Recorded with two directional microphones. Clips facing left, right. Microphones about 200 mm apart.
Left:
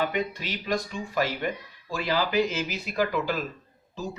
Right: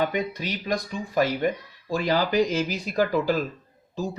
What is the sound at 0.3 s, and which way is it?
Speech, 45° right (ahead or behind).